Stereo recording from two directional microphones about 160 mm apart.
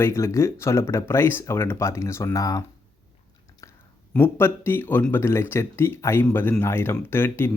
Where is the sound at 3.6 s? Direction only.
20° left (ahead or behind).